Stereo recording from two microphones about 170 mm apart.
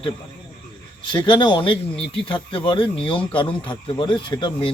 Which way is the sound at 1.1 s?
25° left (ahead or behind).